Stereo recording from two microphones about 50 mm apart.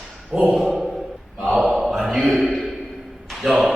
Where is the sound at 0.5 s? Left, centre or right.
Centre.